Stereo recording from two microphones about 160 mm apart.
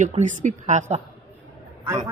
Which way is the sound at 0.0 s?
50° right (ahead or behind).